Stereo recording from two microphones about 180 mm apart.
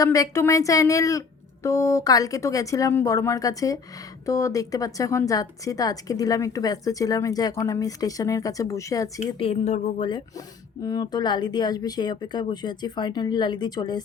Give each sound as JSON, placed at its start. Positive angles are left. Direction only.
{"t": 0.0, "sound": "speech", "side_deg": 20}
{"t": 9.4, "sound": "speech", "side_deg": 35}